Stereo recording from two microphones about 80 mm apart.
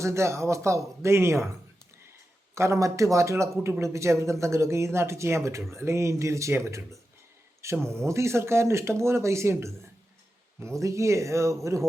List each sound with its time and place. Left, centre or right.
0.0 s speech: right
2.6 s speech: right